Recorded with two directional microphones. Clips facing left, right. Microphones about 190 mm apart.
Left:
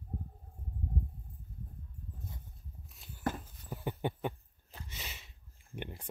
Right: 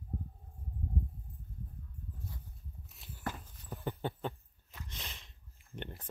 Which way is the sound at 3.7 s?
10° left (ahead or behind).